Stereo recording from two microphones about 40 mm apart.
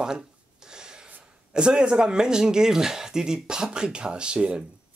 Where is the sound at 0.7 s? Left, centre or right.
Centre.